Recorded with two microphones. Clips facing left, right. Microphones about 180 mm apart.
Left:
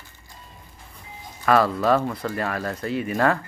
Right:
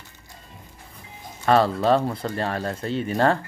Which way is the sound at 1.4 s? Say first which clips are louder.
Right 1 dB; 25° right (ahead or behind).